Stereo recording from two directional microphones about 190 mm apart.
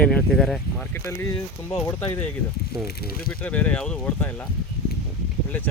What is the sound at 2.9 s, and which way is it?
Speech, 55° left (ahead or behind).